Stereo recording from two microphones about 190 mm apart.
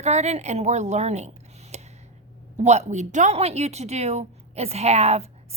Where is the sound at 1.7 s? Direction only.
35° right (ahead or behind).